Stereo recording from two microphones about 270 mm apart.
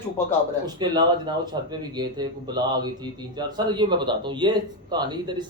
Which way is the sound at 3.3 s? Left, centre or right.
Centre.